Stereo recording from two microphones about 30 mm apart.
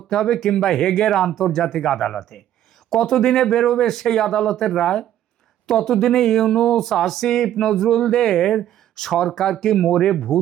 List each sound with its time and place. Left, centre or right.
0.1 s speech: centre
4.8 s speech: centre